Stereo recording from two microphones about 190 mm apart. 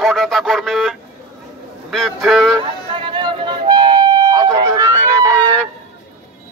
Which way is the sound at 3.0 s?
25° right (ahead or behind).